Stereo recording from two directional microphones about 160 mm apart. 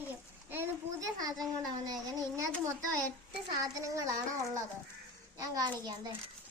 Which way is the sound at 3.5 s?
20° right (ahead or behind).